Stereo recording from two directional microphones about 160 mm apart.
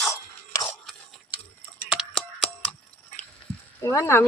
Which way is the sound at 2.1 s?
5° left (ahead or behind).